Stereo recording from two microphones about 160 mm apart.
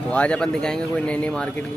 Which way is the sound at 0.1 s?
5° left (ahead or behind).